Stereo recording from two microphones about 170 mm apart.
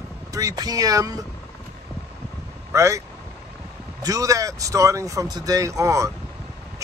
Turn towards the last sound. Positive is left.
turn(degrees=-20)  # may be behind; listen again after turning